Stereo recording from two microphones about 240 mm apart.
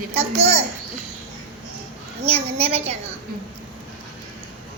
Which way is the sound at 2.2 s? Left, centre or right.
Right.